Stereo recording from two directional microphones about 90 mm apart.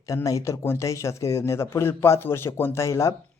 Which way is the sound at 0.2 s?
35° left (ahead or behind).